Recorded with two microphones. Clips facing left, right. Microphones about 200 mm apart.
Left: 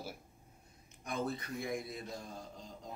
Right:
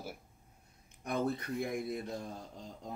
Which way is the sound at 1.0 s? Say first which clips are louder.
Right 4 dB; 55° right (ahead or behind).